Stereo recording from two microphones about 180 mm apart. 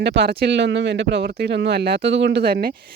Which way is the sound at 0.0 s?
70° right (ahead or behind).